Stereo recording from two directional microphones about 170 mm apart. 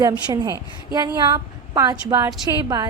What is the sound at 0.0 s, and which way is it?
A woman's voice, 20° right (ahead or behind).